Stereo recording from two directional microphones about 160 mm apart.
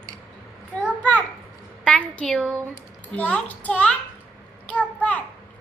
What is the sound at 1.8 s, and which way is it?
A woman's voice, 10° left (ahead or behind).